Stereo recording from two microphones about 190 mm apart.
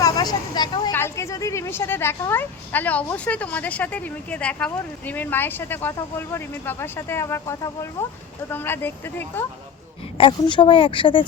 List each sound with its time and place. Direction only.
0.0 s speech: 20° left (ahead or behind)
10.2 s speech: 25° left (ahead or behind)